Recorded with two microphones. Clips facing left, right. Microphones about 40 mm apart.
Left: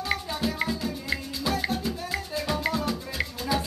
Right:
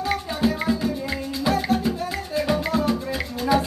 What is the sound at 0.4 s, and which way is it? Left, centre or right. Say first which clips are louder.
Music: right 6 dB; centre.